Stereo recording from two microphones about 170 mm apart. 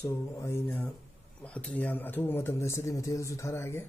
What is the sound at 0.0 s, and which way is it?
Speech, 15° left (ahead or behind).